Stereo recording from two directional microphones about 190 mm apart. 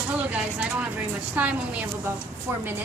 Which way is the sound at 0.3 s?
5° right (ahead or behind).